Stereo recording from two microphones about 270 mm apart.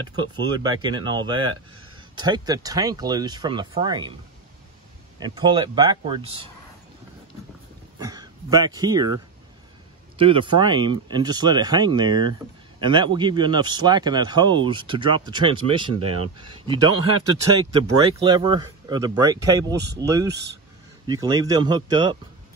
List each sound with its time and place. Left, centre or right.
0.1 s speech: centre
5.2 s speech: centre
8.0 s speech: centre
18.2 s speech: centre